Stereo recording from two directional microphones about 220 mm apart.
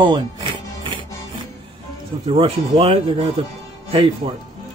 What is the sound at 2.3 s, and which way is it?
Music, 25° right (ahead or behind).